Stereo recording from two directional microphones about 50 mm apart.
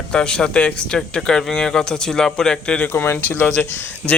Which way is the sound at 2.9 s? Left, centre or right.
Left.